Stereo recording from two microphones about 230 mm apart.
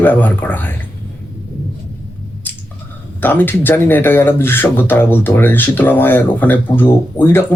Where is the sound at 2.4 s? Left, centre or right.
Centre.